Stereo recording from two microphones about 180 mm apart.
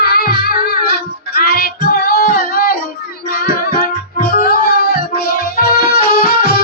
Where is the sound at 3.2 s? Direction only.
55° left (ahead or behind).